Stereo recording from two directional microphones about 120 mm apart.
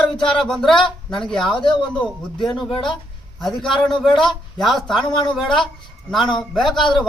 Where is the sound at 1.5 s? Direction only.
45° left (ahead or behind).